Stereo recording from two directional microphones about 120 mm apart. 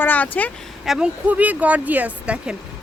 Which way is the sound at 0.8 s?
5° right (ahead or behind).